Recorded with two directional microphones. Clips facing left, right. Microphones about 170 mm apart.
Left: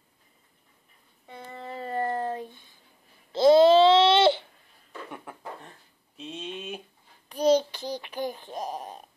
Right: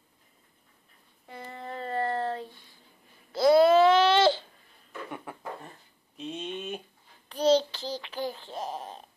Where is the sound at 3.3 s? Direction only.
25° left (ahead or behind).